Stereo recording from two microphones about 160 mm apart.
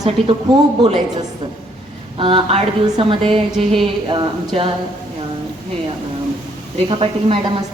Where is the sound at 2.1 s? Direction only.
35° right (ahead or behind).